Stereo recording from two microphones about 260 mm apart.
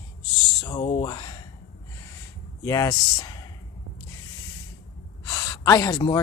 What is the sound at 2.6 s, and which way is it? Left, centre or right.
Speech, centre.